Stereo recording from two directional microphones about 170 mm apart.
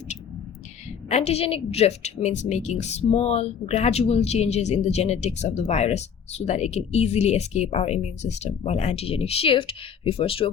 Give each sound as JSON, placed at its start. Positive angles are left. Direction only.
{"t": 1.1, "sound": "a woman's voice", "side_deg": 40}